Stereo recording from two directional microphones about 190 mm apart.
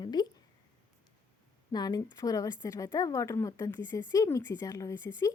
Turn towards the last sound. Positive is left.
turn(degrees=15)  # may be behind; listen again after turning